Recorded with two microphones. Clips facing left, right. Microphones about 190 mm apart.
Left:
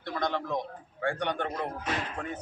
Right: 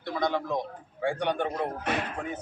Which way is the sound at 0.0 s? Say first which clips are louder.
Right 3 dB; 5° right (ahead or behind).